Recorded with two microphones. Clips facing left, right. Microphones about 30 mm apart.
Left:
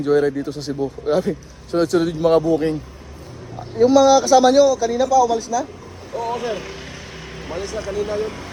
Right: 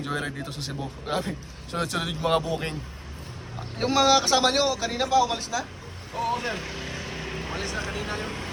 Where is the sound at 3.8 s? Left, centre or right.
Right.